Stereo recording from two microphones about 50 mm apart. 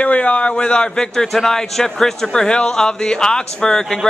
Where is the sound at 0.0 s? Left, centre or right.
Left.